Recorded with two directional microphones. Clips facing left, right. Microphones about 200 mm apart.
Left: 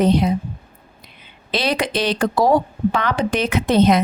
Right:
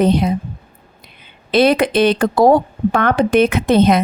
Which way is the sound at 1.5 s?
55° right (ahead or behind).